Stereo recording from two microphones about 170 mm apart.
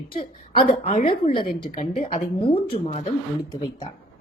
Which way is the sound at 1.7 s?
40° left (ahead or behind).